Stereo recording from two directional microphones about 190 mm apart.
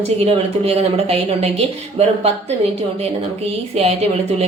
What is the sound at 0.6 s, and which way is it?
Speech, 30° right (ahead or behind).